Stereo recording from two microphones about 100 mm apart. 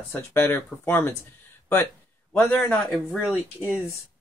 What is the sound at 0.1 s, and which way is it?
Speech, 20° left (ahead or behind).